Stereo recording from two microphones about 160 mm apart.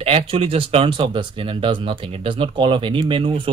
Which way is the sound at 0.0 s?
35° right (ahead or behind).